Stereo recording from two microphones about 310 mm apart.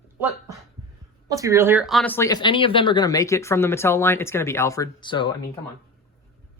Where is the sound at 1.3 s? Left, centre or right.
Centre.